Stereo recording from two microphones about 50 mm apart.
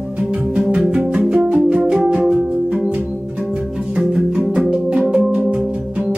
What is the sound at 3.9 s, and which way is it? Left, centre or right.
Music, right.